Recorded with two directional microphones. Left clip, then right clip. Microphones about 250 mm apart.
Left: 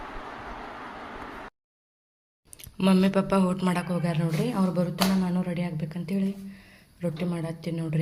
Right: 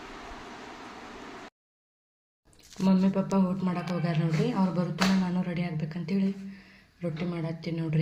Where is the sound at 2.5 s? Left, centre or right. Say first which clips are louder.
Left 4 dB; centre.